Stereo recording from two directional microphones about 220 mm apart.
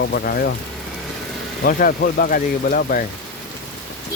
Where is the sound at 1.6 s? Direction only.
45° left (ahead or behind).